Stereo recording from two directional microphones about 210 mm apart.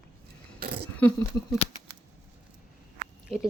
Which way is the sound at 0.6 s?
50° right (ahead or behind).